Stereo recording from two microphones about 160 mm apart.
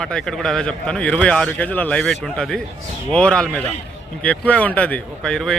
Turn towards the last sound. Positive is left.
turn(degrees=5)  # may be behind; listen again after turning